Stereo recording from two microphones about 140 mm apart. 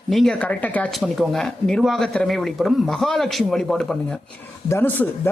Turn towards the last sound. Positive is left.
turn(degrees=15)  # may be behind; listen again after turning